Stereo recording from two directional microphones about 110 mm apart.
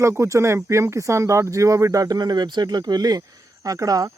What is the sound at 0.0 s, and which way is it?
Speech, 25° right (ahead or behind).